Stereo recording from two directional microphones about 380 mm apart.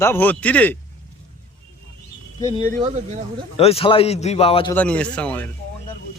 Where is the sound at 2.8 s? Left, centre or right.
Centre.